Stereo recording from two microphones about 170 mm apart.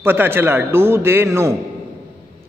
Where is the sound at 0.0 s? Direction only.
10° right (ahead or behind).